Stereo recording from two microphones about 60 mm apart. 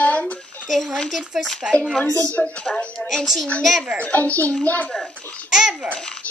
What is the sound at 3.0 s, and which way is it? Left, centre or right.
Speech, centre.